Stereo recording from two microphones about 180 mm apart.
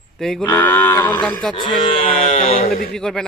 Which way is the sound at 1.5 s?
25° left (ahead or behind).